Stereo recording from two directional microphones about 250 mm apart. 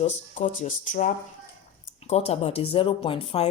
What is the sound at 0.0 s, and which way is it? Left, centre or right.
Speech, left.